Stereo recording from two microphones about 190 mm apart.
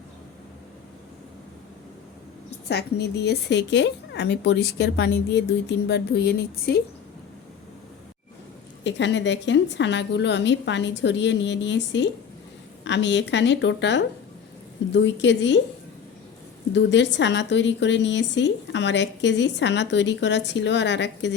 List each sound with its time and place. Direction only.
2.6 s a woman's voice: 60° left (ahead or behind)
8.8 s a woman's voice: 70° left (ahead or behind)
16.7 s a woman's voice: 70° left (ahead or behind)